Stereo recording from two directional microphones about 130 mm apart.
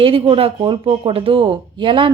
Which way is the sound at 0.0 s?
45° right (ahead or behind).